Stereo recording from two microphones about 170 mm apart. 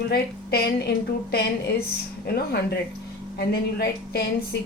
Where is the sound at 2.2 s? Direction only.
70° left (ahead or behind).